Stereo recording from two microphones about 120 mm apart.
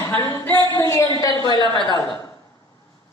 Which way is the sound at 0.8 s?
25° left (ahead or behind).